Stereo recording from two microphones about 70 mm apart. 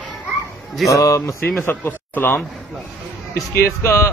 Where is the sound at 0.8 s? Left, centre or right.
Left.